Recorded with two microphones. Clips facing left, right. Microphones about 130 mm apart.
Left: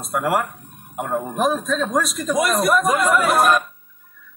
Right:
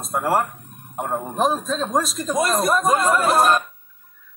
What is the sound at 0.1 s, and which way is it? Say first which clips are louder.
Speech: even; 30° right (ahead or behind).